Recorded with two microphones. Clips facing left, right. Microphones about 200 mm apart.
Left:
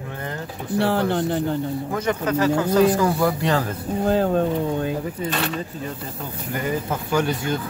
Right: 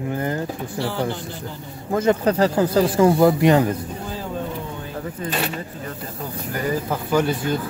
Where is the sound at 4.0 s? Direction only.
60° left (ahead or behind).